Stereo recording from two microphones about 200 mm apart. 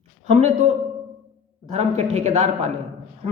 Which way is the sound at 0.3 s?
35° right (ahead or behind).